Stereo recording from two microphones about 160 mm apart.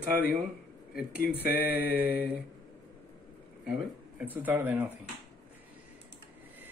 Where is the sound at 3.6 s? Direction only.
10° right (ahead or behind).